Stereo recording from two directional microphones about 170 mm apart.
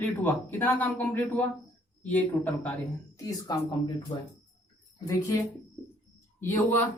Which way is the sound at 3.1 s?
20° left (ahead or behind).